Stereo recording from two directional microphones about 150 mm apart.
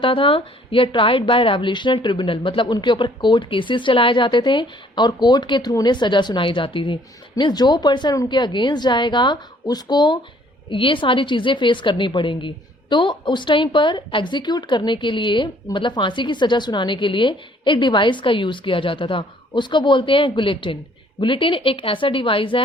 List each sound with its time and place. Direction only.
0.0 s a woman's voice: 35° left (ahead or behind)